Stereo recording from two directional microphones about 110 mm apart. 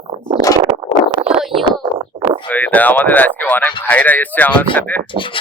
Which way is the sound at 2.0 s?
55° right (ahead or behind).